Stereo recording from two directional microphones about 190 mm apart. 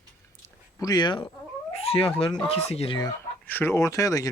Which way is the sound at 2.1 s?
30° left (ahead or behind).